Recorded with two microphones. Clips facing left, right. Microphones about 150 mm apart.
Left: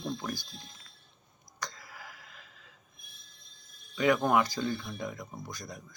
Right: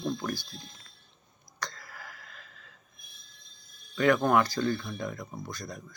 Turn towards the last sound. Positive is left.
turn(degrees=15)  # may be behind; listen again after turning